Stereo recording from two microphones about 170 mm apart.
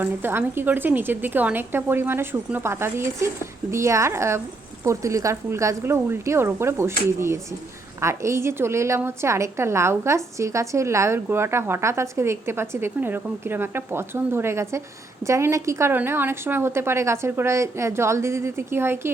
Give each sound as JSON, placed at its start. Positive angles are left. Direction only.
{"t": 0.0, "sound": "a woman's voice", "side_deg": -15}